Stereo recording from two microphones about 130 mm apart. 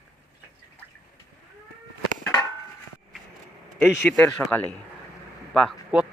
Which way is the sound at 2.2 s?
30° left (ahead or behind).